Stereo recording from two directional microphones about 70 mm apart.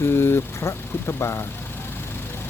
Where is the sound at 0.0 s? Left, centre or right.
Left.